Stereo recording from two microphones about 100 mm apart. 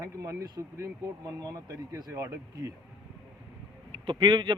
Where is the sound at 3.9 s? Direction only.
55° right (ahead or behind).